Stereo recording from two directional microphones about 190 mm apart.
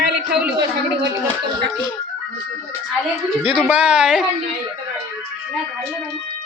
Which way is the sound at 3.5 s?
5° right (ahead or behind).